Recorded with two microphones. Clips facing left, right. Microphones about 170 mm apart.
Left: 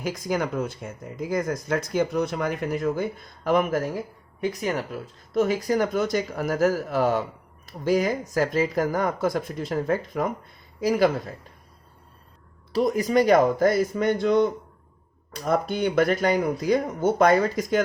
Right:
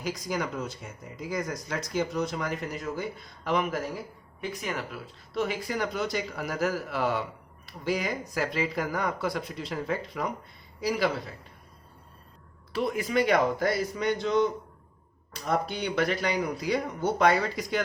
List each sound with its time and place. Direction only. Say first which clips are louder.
0.0 s speech: left 5 dB; 50° left (ahead or behind)
12.7 s speech: left 6 dB; 40° left (ahead or behind)